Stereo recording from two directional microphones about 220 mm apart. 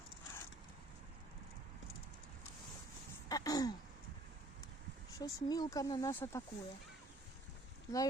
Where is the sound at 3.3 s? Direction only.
15° left (ahead or behind).